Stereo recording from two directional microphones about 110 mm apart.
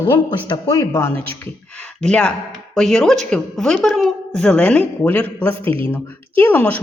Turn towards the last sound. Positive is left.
turn(degrees=15)  # may be behind; listen again after turning